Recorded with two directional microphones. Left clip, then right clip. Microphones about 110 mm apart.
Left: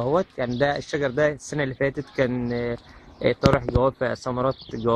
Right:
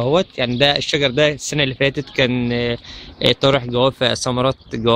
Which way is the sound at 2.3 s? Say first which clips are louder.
Right 7 dB; 15° right (ahead or behind).